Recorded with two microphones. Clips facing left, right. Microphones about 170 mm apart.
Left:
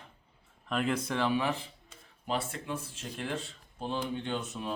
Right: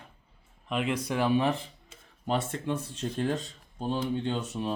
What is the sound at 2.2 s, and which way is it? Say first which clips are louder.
Speech: right 4 dB; 30° right (ahead or behind).